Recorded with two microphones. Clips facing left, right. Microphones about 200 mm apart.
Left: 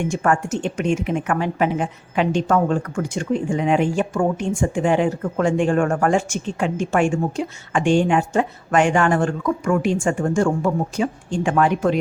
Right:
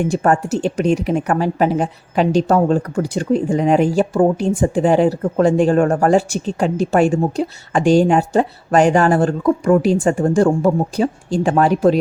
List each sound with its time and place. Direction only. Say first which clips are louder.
0.0 s speech: right 4 dB; 35° right (ahead or behind)